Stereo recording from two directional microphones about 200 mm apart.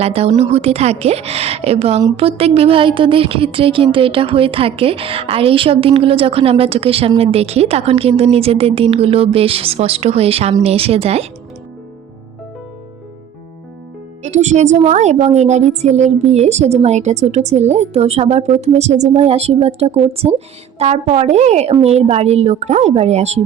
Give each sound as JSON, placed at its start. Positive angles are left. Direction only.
{"t": 0.0, "sound": "a woman's voice", "side_deg": -30}
{"t": 14.2, "sound": "a woman's voice", "side_deg": -35}